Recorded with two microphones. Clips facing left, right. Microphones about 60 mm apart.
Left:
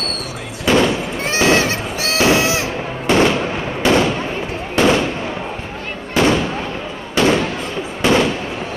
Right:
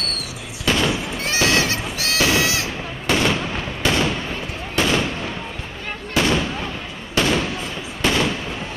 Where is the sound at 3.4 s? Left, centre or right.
Left.